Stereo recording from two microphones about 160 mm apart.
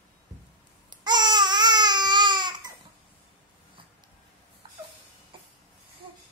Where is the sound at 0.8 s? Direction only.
25° right (ahead or behind).